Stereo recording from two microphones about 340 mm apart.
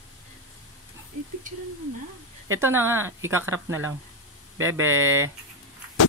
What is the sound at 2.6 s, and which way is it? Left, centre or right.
Speech, centre.